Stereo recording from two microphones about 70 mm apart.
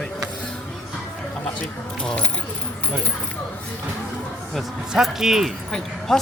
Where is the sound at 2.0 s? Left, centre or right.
Centre.